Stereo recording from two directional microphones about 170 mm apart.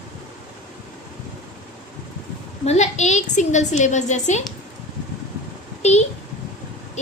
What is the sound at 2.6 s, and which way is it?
A woman's voice, 40° left (ahead or behind).